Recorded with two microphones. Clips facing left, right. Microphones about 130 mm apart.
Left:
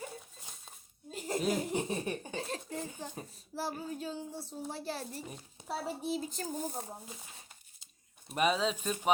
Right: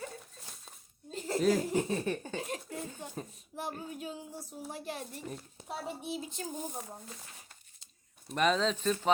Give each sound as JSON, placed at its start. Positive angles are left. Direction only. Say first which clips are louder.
{"t": 0.2, "sound": "a sound", "louder": "right 1 dB", "side_deg": 0}
{"t": 1.1, "sound": "speech", "louder": "right 4 dB", "side_deg": 15}
{"t": 2.3, "sound": "giggle", "louder": "even", "side_deg": 30}
{"t": 3.3, "sound": "a child's voice", "louder": "left 2 dB", "side_deg": 35}
{"t": 5.2, "sound": "a woman's voice", "louder": "right 4 dB", "side_deg": 5}
{"t": 5.6, "sound": "a child's voice", "louder": "left 3 dB", "side_deg": 35}
{"t": 7.0, "sound": "speech", "louder": "even", "side_deg": 5}
{"t": 8.3, "sound": "speech", "louder": "right 1 dB", "side_deg": 10}